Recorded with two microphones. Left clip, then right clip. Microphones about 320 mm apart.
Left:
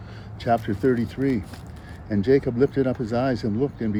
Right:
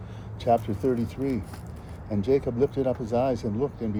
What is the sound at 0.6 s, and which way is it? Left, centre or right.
Speech, left.